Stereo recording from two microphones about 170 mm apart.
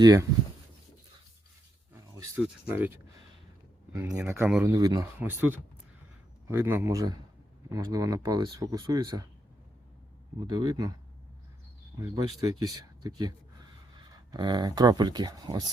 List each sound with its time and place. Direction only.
0.0 s speech: 20° right (ahead or behind)
1.9 s a sound: 15° right (ahead or behind)
2.7 s speech: 15° right (ahead or behind)
10.5 s speech: 25° right (ahead or behind)
11.9 s speech: 20° right (ahead or behind)